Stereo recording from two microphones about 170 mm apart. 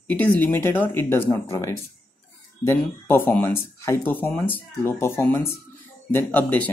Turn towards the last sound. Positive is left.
turn(degrees=10)  # may be behind; listen again after turning